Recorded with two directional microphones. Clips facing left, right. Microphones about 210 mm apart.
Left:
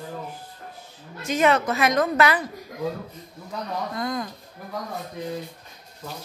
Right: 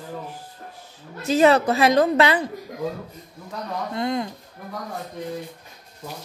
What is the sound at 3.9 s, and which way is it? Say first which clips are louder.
Speech: right 6 dB; 25° right (ahead or behind).